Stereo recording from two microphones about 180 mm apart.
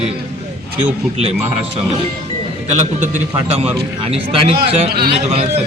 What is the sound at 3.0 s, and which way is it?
A man's voice, 40° right (ahead or behind).